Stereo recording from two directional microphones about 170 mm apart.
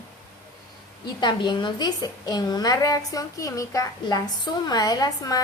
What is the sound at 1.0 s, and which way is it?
A woman's voice, 25° left (ahead or behind).